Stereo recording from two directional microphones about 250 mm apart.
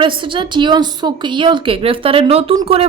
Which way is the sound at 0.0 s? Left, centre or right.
Centre.